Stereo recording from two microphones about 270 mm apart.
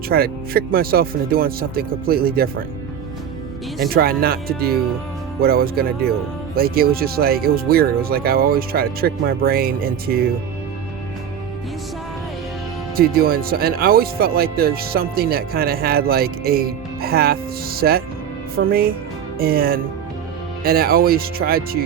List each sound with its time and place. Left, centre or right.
0.1 s speech: right
3.9 s speech: right
13.0 s speech: right